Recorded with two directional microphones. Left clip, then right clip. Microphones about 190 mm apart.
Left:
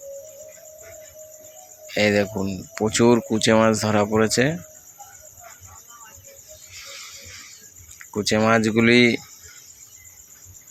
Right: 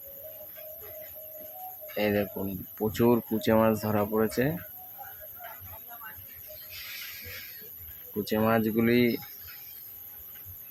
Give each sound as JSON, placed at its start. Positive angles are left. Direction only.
{"t": 2.0, "sound": "speech", "side_deg": 20}
{"t": 8.2, "sound": "speech", "side_deg": 20}